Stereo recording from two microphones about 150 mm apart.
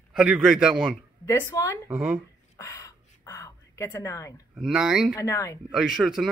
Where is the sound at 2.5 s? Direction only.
20° left (ahead or behind).